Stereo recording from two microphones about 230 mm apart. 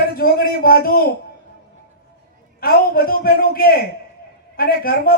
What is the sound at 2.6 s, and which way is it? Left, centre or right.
Speech, left.